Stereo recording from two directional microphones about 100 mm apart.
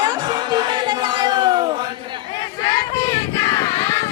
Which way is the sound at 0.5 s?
45° right (ahead or behind).